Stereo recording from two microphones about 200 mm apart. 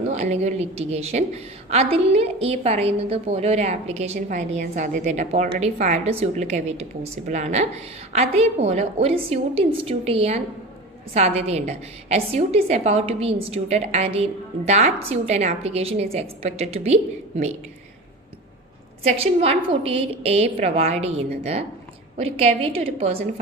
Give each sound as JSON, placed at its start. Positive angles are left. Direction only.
{"t": 0.1, "sound": "a woman's voice", "side_deg": -35}
{"t": 19.0, "sound": "a woman's voice", "side_deg": -30}